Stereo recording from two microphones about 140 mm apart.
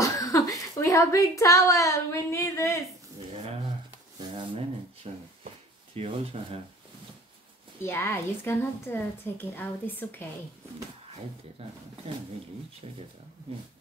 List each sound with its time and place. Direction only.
0.0 s a woman's voice: 25° left (ahead or behind)
5.9 s speech: 45° right (ahead or behind)
7.8 s a woman's voice: 15° left (ahead or behind)
12.8 s speech: 45° right (ahead or behind)